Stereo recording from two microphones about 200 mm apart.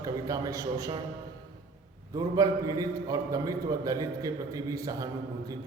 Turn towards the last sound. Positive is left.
turn(degrees=-15)  # may be behind; listen again after turning